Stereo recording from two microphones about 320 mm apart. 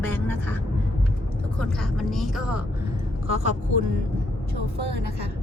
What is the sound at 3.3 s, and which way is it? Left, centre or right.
Speech, right.